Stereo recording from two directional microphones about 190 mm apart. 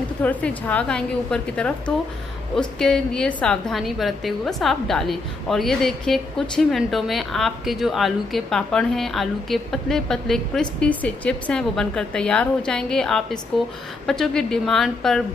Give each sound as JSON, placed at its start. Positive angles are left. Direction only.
{"t": 0.2, "sound": "a woman's voice", "side_deg": 10}